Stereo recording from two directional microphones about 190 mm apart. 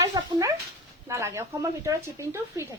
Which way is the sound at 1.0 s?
15° right (ahead or behind).